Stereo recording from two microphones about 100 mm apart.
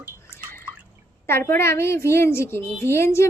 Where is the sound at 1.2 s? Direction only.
25° left (ahead or behind).